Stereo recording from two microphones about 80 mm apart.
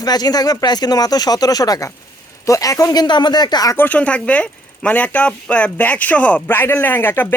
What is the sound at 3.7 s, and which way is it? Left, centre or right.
Speech, left.